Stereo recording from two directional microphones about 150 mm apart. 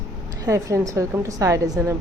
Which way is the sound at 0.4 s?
20° right (ahead or behind).